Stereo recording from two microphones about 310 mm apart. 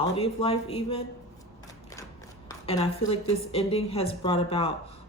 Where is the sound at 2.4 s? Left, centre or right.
Centre.